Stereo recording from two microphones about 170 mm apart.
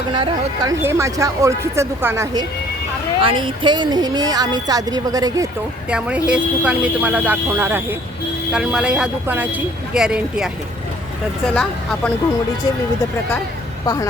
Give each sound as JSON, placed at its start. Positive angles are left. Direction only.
{"t": 0.1, "sound": "speech", "side_deg": -30}
{"t": 0.8, "sound": "speech", "side_deg": -15}
{"t": 5.9, "sound": "speech", "side_deg": -5}
{"t": 11.5, "sound": "speech", "side_deg": 5}
{"t": 13.8, "sound": "a woman's voice", "side_deg": 20}